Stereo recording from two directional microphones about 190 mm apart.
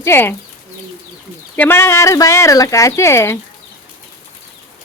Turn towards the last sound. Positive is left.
turn(degrees=15)  # may be behind; listen again after turning